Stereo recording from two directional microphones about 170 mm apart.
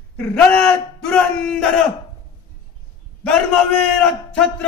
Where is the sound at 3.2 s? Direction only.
5° left (ahead or behind).